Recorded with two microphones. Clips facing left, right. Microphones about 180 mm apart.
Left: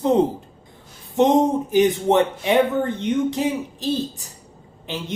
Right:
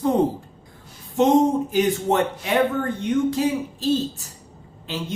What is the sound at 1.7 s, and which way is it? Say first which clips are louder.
Speech: left 4 dB; 20° left (ahead or behind).